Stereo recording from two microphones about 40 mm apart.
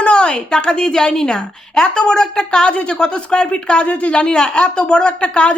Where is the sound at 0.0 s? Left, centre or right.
Left.